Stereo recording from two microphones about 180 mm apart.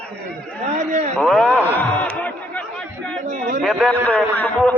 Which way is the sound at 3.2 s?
45° right (ahead or behind).